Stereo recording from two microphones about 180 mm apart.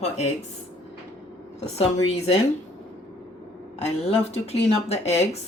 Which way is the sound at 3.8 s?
35° left (ahead or behind).